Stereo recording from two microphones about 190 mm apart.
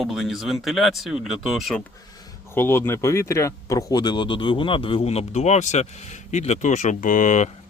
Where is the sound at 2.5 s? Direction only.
10° left (ahead or behind).